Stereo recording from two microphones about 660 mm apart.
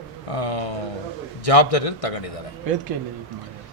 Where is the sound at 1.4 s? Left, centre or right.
Left.